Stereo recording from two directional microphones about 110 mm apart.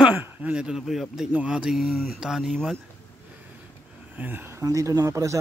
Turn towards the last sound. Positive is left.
turn(degrees=-30)  # may be behind; listen again after turning